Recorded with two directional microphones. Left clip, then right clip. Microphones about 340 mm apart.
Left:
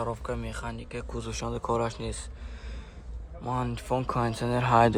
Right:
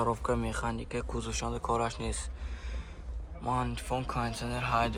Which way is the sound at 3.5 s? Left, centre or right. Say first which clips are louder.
Left 2 dB; centre.